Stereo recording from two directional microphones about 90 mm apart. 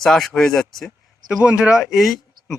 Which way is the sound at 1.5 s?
10° right (ahead or behind).